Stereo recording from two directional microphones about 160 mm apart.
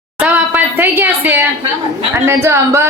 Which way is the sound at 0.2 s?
10° right (ahead or behind).